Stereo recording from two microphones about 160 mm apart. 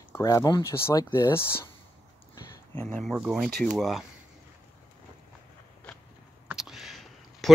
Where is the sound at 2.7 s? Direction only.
10° left (ahead or behind).